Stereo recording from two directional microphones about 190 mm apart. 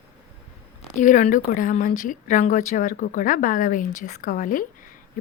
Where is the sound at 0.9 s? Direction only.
40° left (ahead or behind).